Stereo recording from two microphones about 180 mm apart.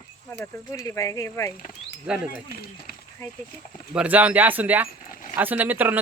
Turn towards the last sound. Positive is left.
turn(degrees=-10)  # may be behind; listen again after turning